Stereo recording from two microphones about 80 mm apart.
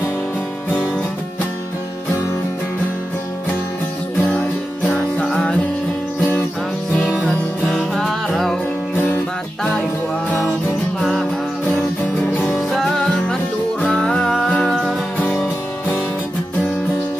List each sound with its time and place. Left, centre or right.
4.2 s music: centre
7.7 s music: centre
8.9 s music: left
11.0 s music: centre
12.3 s music: left
12.5 s music: centre
15.1 s music: centre